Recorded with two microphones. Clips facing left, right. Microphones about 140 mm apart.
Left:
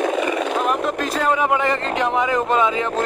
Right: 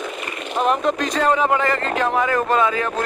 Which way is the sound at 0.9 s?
5° left (ahead or behind).